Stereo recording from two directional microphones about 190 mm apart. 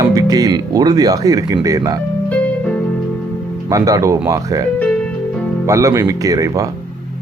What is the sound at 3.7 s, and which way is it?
Speech, 20° right (ahead or behind).